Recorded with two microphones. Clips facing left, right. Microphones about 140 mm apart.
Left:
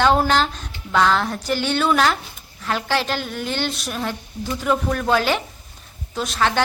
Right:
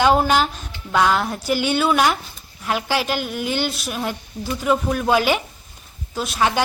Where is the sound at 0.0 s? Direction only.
10° right (ahead or behind).